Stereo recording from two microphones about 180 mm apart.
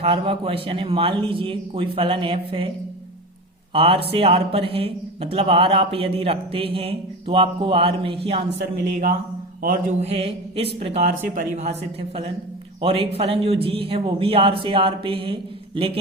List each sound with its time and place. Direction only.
0.0 s a man's voice: 30° right (ahead or behind)
3.7 s speech: 30° right (ahead or behind)
9.6 s speech: 45° right (ahead or behind)
12.8 s speech: 30° right (ahead or behind)